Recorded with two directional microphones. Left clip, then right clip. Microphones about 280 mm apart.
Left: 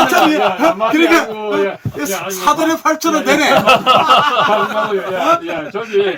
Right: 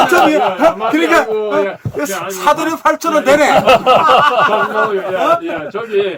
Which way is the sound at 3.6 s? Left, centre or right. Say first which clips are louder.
Right 1 dB; right.